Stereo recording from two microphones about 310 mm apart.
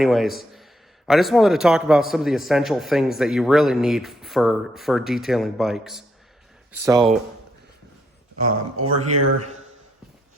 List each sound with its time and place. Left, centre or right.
0.0 s a man's voice: centre
8.4 s speech: right